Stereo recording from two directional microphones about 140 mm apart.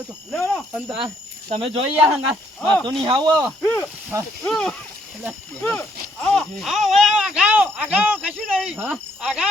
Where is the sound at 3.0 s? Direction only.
30° right (ahead or behind).